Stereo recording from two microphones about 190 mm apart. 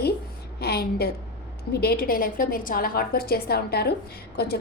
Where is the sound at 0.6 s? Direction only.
55° left (ahead or behind).